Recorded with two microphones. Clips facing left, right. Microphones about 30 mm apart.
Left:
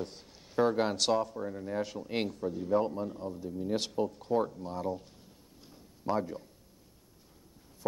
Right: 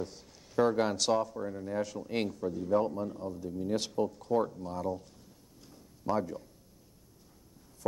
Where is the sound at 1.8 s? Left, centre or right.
Left.